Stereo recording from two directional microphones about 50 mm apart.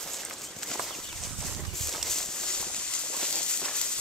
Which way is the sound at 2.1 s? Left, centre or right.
Centre.